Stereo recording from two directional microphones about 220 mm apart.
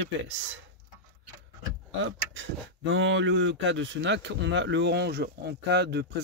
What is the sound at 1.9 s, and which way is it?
Speech, 55° right (ahead or behind).